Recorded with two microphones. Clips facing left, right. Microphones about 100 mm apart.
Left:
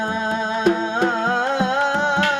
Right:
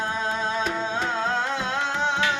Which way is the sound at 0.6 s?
50° left (ahead or behind).